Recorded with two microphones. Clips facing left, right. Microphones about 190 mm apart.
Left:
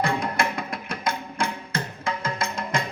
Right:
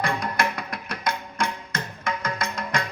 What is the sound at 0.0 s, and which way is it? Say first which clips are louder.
Music: left 1 dB; 30° left (ahead or behind).